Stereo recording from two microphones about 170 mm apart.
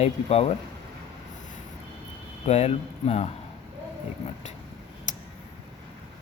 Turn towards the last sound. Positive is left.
turn(degrees=45)  # may be behind; listen again after turning